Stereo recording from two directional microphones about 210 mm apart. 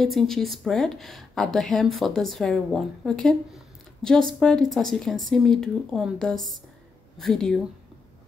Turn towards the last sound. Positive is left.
turn(degrees=5)  # may be behind; listen again after turning